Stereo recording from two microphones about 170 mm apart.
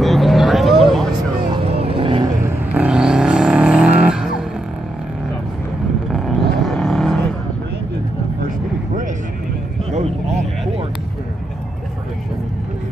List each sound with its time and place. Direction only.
0.0 s vehicle: centre (ahead or behind)
1.5 s vehicle: 35° right (ahead or behind)
2.7 s vehicle: 5° right (ahead or behind)
6.1 s vehicle: centre (ahead or behind)
9.9 s a sound: 40° right (ahead or behind)